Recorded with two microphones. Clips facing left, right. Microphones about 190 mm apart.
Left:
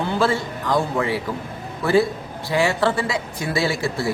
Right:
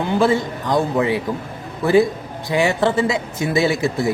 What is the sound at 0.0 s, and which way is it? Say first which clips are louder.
Speech: right 4 dB; 15° right (ahead or behind).